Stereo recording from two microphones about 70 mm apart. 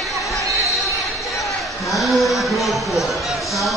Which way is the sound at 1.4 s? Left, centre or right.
Centre.